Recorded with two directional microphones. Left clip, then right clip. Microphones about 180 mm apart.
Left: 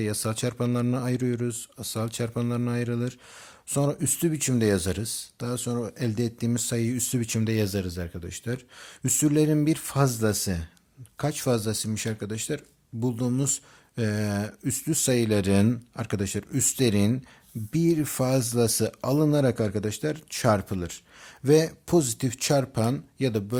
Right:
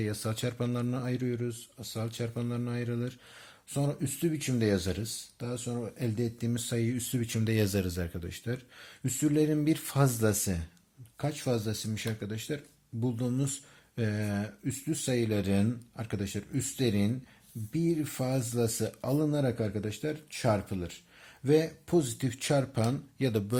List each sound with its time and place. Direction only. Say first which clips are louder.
0.0 s speech: left 5 dB; 30° left (ahead or behind)
8.3 s speech: left 4 dB; 30° left (ahead or behind)
11.2 s speech: left 6 dB; 45° left (ahead or behind); by 23.6 s 25° left (ahead or behind)